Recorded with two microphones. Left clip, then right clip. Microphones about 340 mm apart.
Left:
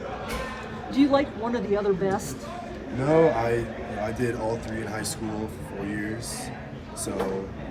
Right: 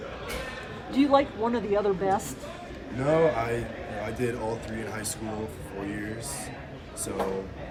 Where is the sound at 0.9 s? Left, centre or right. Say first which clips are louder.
Even; centre.